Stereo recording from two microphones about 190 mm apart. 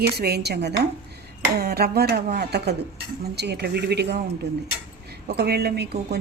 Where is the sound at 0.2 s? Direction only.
60° right (ahead or behind).